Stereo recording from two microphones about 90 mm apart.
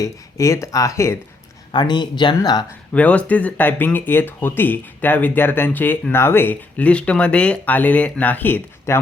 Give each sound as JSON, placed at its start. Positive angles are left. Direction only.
{"t": 0.0, "sound": "speech", "side_deg": 35}
{"t": 1.7, "sound": "speech", "side_deg": 55}
{"t": 2.9, "sound": "speech", "side_deg": 15}